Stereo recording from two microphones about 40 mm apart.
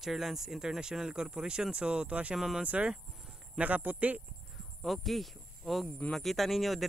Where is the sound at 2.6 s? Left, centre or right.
Right.